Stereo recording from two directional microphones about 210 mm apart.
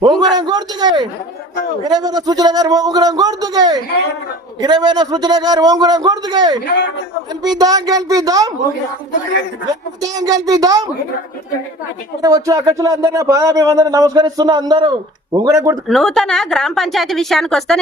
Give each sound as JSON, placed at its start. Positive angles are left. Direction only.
{"t": 0.0, "sound": "a man's voice", "side_deg": -20}
{"t": 7.6, "sound": "speech", "side_deg": -20}
{"t": 10.0, "sound": "speech", "side_deg": -15}
{"t": 12.2, "sound": "speech", "side_deg": -15}
{"t": 15.9, "sound": "speech", "side_deg": 0}